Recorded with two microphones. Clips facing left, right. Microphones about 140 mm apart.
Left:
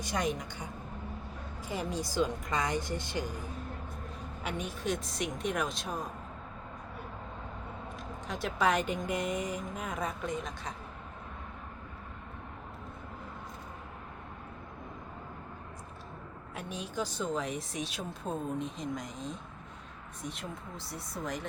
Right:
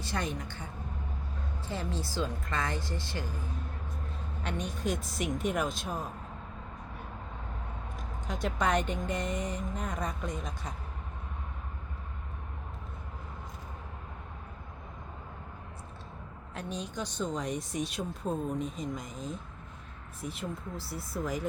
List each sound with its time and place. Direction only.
0.0 s speech: 15° left (ahead or behind)
4.4 s speech: 5° left (ahead or behind)
7.9 s speech: centre (ahead or behind)
16.6 s speech: 5° left (ahead or behind)